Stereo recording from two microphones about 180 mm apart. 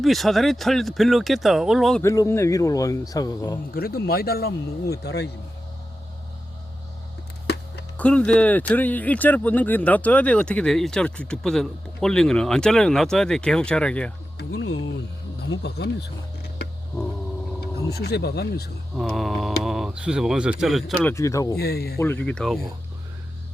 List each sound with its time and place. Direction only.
0.0 s speech: centre (ahead or behind)
2.0 s speech: 15° left (ahead or behind)
3.8 s speech: 55° left (ahead or behind)
7.4 s music: 70° left (ahead or behind)
7.9 s speech: 5° left (ahead or behind)
14.3 s music: 90° left
15.4 s speech: 70° left (ahead or behind)
17.9 s speech: 65° left (ahead or behind)
18.9 s speech: centre (ahead or behind)
21.1 s speech: 15° left (ahead or behind)
21.6 s speech: 60° left (ahead or behind)
21.9 s speech: 10° left (ahead or behind)